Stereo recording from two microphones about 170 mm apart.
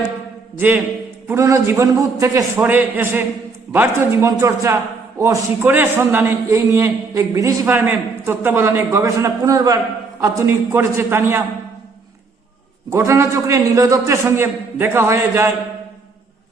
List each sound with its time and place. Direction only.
1.3 s a man's voice: 15° right (ahead or behind)
12.9 s a man's voice: 15° right (ahead or behind)